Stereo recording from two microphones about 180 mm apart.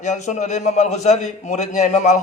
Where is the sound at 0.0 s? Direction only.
40° left (ahead or behind).